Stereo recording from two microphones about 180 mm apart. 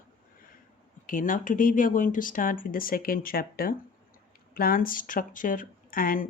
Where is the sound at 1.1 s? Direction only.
45° left (ahead or behind).